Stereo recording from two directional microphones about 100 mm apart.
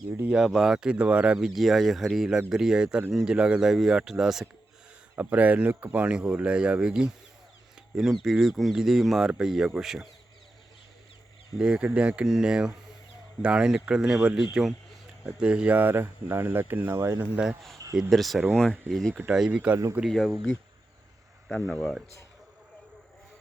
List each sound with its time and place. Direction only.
0.3 s speech: 5° right (ahead or behind)
1.5 s speech: centre (ahead or behind)
5.1 s speech: 15° right (ahead or behind)
11.5 s speech: 10° right (ahead or behind); by 17.2 s 25° right (ahead or behind)
17.3 s speech: 15° right (ahead or behind)
18.1 s speech: centre (ahead or behind)
19.1 s speech: 10° right (ahead or behind)
20.1 s speech: centre (ahead or behind)
21.5 s speech: centre (ahead or behind)